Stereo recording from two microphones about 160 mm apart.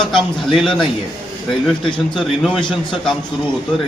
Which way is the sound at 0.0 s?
Centre (ahead or behind).